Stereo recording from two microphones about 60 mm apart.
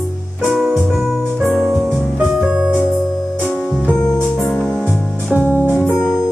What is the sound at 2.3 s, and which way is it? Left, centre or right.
Music, centre.